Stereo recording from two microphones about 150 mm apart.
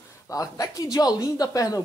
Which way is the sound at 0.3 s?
25° left (ahead or behind).